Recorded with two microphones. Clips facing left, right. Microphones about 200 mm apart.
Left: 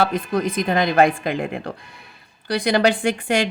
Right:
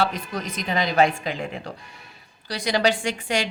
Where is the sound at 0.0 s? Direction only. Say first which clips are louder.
Left 6 dB; 55° left (ahead or behind).